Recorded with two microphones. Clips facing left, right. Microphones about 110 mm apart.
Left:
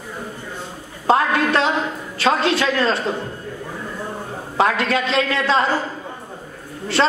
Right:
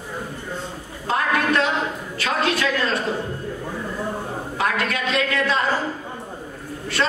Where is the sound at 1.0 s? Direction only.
30° left (ahead or behind).